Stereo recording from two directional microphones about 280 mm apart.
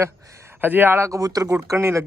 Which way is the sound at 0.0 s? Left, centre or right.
Centre.